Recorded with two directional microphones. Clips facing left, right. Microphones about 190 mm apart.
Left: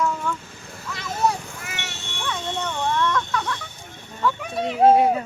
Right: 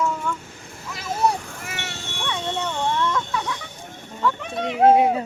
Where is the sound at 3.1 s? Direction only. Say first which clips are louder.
Left 1 dB; 10° right (ahead or behind).